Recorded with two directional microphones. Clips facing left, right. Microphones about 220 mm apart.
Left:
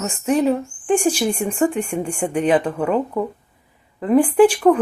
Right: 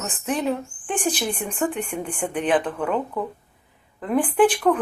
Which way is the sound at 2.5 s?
10° left (ahead or behind).